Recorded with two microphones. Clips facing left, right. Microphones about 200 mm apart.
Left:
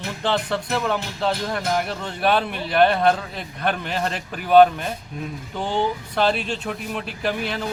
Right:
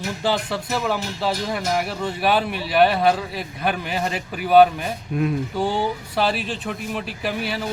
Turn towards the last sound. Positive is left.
turn(degrees=-5)  # may be behind; listen again after turning